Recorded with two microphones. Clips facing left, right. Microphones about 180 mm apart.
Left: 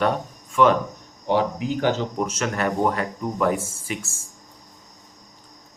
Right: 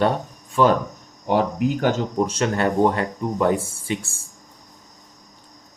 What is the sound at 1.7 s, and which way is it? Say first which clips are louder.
Speech: left 3 dB; 45° right (ahead or behind).